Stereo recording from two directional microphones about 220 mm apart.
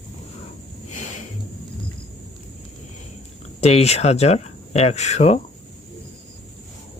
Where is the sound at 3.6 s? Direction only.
30° left (ahead or behind).